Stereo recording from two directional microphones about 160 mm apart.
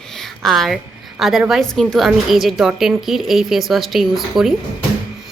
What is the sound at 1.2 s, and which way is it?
A woman's voice, centre (ahead or behind).